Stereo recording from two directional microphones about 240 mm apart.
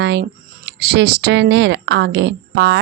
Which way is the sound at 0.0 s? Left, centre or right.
Right.